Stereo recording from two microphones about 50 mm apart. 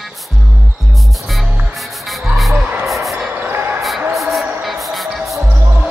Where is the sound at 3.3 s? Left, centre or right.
Right.